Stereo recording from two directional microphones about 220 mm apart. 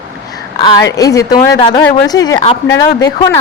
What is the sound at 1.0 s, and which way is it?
Speech, 15° left (ahead or behind).